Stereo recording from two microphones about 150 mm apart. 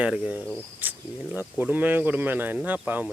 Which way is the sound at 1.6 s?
10° right (ahead or behind).